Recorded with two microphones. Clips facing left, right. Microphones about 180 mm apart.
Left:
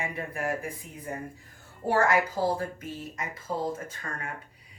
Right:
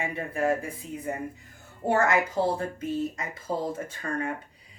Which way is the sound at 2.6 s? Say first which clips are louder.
Right 6 dB; 30° right (ahead or behind).